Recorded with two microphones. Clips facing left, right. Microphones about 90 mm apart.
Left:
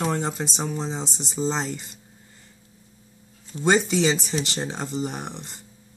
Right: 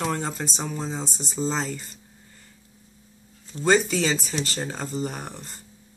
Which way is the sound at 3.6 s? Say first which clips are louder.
Left 1 dB; 20° left (ahead or behind).